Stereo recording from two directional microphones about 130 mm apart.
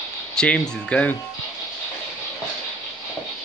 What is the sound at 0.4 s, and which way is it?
Speech, 10° left (ahead or behind).